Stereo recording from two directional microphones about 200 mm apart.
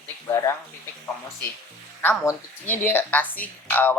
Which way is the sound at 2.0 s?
10° left (ahead or behind).